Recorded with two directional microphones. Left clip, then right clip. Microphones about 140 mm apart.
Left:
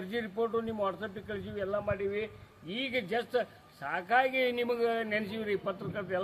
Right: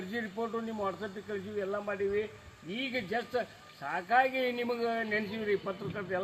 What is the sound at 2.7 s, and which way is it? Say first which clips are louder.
A man's voice: left 2 dB; 35° left (ahead or behind).